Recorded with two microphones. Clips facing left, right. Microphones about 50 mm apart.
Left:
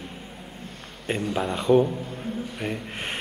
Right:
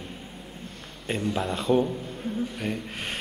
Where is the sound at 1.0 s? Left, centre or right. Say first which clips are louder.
Left 1 dB; centre.